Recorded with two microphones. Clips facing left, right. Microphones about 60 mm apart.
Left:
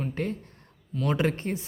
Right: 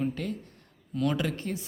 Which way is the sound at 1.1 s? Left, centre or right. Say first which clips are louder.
Left 7 dB; left.